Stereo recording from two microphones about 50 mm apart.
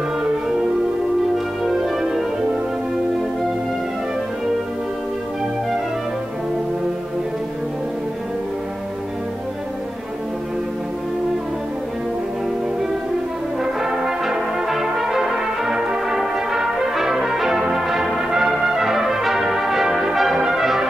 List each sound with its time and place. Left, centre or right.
1.6 s music: centre
13.6 s brass instrument: centre